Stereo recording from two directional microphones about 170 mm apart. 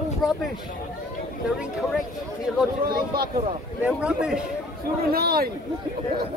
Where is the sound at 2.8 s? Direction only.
65° right (ahead or behind).